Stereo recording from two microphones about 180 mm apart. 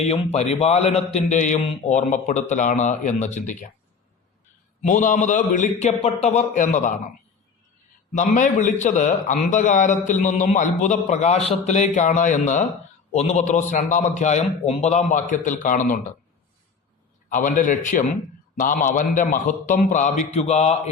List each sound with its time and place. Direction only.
0.0 s a man's voice: 35° left (ahead or behind)
4.8 s a man's voice: 45° left (ahead or behind)
8.1 s a man's voice: 45° left (ahead or behind)
17.2 s a man's voice: 45° left (ahead or behind)